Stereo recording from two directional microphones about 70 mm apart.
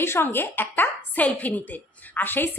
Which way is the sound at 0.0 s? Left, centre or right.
Left.